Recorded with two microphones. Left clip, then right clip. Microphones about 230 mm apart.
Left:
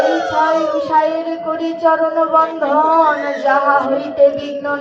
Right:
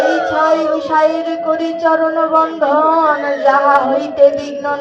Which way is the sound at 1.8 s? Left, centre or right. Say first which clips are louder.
Even; right.